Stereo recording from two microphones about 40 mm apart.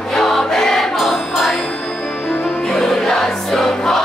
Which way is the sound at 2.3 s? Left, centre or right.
Centre.